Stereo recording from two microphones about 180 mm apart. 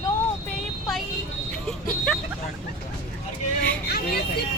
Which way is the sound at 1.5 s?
5° left (ahead or behind).